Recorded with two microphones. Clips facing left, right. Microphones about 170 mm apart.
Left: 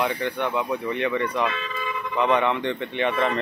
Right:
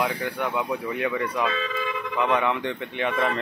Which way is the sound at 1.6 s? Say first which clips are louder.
Right 2 dB; 90° right.